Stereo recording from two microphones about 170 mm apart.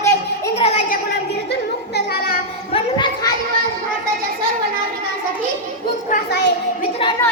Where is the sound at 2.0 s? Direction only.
60° left (ahead or behind).